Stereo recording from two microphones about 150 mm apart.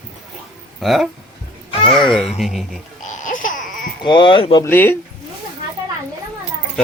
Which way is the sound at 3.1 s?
60° left (ahead or behind).